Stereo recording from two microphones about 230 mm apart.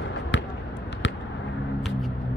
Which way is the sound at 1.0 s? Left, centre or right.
Left.